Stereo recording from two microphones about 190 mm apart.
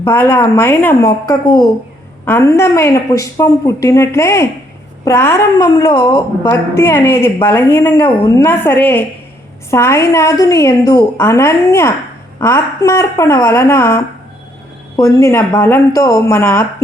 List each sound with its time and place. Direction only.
0.0 s a woman's voice: 10° left (ahead or behind); by 6.2 s 25° left (ahead or behind)
6.4 s a woman's voice: 10° left (ahead or behind)